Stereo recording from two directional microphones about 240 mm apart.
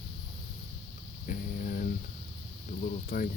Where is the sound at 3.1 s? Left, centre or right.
Left.